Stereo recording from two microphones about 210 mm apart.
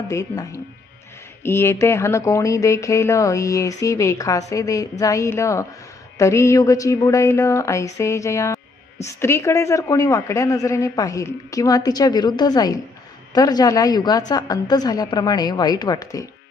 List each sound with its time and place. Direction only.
0.1 s a woman's voice: 15° left (ahead or behind)